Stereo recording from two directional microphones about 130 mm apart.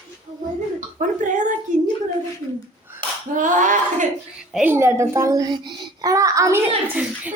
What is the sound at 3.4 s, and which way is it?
Slap, 75° right (ahead or behind).